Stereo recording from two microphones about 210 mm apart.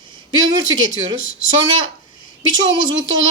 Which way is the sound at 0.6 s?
65° right (ahead or behind).